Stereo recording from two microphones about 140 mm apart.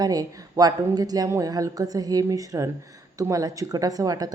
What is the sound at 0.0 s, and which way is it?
A woman's voice, 25° right (ahead or behind).